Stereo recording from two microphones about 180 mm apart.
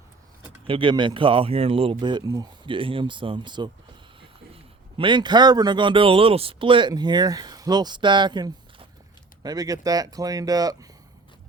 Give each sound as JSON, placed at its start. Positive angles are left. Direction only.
{"t": 0.7, "sound": "a man's voice", "side_deg": -30}